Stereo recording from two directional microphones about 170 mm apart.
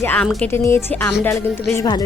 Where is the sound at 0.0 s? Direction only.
10° left (ahead or behind).